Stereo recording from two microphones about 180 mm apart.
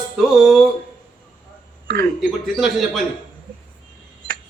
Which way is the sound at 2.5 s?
Centre (ahead or behind).